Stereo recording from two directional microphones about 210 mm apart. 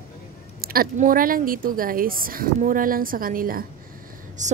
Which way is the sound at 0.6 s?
45° right (ahead or behind).